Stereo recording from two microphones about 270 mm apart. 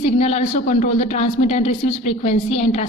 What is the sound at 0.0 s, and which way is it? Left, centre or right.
A woman's voice, left.